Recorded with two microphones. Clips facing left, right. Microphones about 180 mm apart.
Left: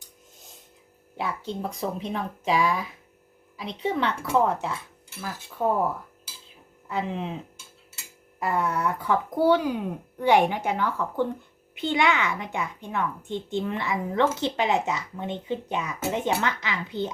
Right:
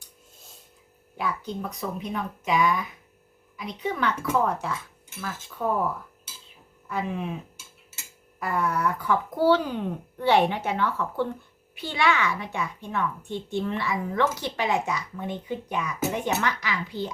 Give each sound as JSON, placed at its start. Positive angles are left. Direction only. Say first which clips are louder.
{"t": 1.1, "sound": "a child's voice", "louder": "even", "side_deg": 25}
{"t": 6.9, "sound": "a child's voice", "louder": "even", "side_deg": 20}
{"t": 8.4, "sound": "a child's voice", "louder": "left 1 dB", "side_deg": 25}